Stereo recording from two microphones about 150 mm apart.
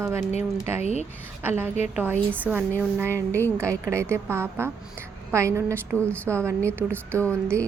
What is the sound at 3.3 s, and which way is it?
Speech, 15° left (ahead or behind).